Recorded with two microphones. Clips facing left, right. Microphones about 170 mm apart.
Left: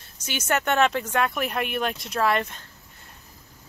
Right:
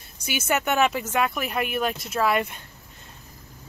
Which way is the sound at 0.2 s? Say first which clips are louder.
Right 1 dB; 10° right (ahead or behind).